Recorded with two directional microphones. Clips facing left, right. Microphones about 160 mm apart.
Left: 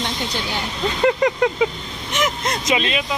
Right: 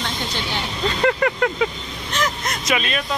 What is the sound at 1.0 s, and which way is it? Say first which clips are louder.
Speech: left 3 dB; 15° left (ahead or behind).